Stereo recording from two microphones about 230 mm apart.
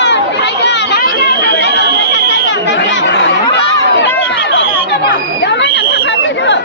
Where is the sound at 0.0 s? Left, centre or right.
Left.